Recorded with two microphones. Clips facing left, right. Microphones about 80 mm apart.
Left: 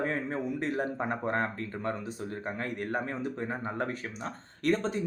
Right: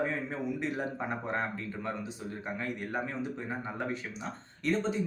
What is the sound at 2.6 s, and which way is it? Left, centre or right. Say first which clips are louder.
Speech: left 2 dB; left.